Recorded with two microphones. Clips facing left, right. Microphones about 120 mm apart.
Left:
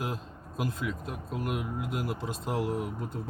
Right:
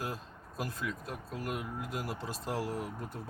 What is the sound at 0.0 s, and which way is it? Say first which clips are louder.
Speech: left 4 dB; 20° left (ahead or behind).